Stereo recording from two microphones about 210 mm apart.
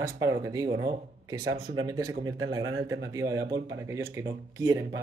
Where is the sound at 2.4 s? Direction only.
75° right (ahead or behind).